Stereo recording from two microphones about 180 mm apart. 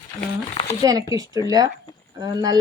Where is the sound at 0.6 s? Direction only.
30° left (ahead or behind).